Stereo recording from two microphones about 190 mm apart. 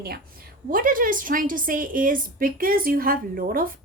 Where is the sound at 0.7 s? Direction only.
45° right (ahead or behind).